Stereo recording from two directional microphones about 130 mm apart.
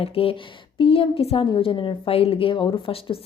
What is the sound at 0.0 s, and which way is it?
A woman's voice, 45° left (ahead or behind).